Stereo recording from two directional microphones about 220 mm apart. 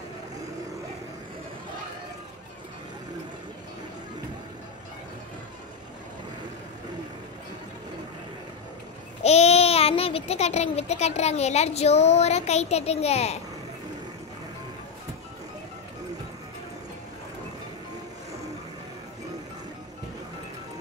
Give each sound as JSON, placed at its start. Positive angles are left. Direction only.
{"t": 9.2, "sound": "a child's voice", "side_deg": 30}